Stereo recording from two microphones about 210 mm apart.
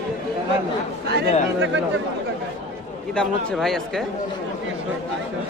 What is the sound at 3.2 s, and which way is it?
Speech, centre (ahead or behind).